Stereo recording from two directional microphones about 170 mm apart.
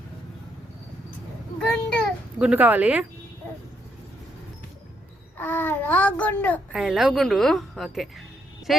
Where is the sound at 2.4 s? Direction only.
10° right (ahead or behind).